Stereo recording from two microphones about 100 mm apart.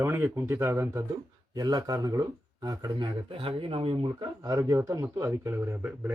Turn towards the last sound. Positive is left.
turn(degrees=-20)  # may be behind; listen again after turning